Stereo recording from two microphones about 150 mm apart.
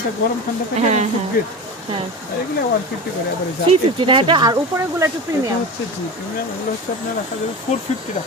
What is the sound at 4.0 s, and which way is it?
Speech, 35° right (ahead or behind).